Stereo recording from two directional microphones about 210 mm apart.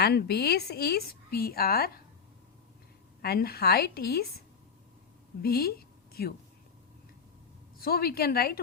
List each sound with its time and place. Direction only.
0.0 s a woman's voice: 50° left (ahead or behind)
3.2 s a woman's voice: 50° left (ahead or behind)
5.4 s a woman's voice: 50° left (ahead or behind)
7.8 s a woman's voice: 45° left (ahead or behind)